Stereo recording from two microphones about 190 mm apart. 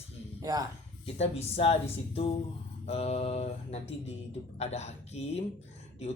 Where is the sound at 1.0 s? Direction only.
35° left (ahead or behind).